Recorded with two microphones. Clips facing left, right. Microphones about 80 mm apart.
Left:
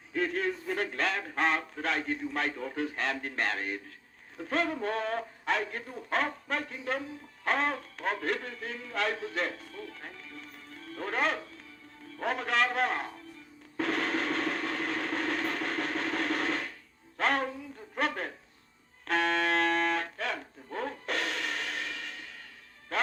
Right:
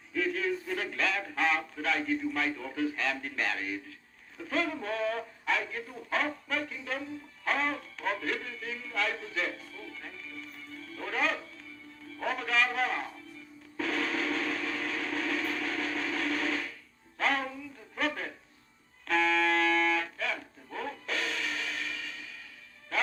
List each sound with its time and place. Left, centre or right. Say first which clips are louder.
0.1 s a sound: even; left
2.3 s a man's voice: even; left
13.7 s vehicle: left 1 dB; left
17.2 s speech: left 2 dB; left
17.9 s a sound: left 1 dB; left
19.0 s music: right 1 dB; left